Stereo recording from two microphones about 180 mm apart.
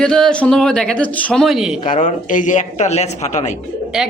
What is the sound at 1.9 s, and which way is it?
Speech, 45° left (ahead or behind).